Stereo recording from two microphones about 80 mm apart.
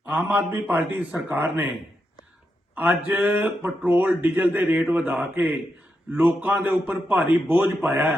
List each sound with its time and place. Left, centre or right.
0.0 s a man's voice: centre
2.7 s a man's voice: right